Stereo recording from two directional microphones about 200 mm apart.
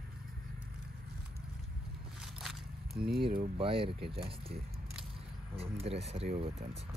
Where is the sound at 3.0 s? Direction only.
50° right (ahead or behind).